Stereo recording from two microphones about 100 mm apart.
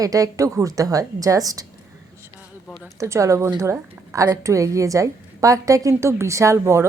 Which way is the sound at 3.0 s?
30° right (ahead or behind).